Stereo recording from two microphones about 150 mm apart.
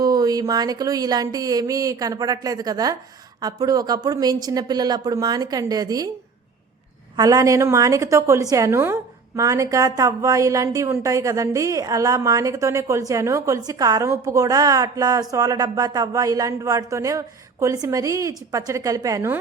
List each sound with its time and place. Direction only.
0.0 s a woman's voice: 25° right (ahead or behind)
7.2 s a woman's voice: 20° right (ahead or behind)